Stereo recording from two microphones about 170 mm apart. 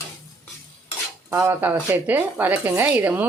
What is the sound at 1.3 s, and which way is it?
A woman's voice, 15° right (ahead or behind).